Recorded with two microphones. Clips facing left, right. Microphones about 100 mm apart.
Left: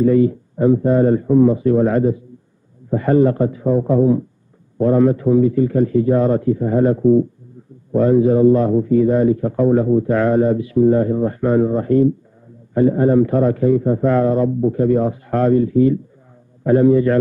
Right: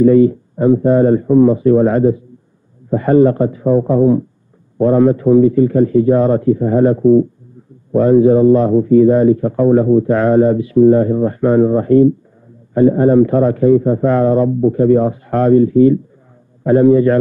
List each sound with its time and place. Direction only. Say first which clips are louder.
0.0 s a man's voice: right 5 dB; 35° right (ahead or behind)